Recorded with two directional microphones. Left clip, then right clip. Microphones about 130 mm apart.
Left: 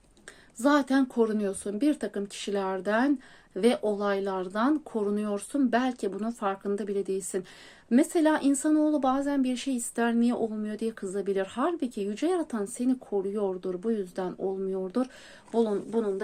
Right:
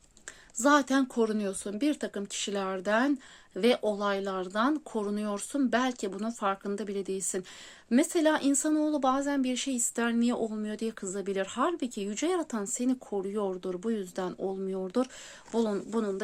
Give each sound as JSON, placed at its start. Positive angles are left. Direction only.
{"t": 0.6, "sound": "speech", "side_deg": -40}
{"t": 15.5, "sound": "speech", "side_deg": -60}